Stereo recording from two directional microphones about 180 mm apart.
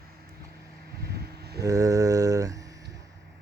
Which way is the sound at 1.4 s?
65° right (ahead or behind).